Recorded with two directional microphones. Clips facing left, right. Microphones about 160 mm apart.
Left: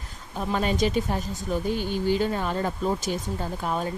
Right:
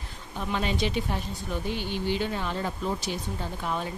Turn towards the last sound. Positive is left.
turn(degrees=40)  # may be behind; listen again after turning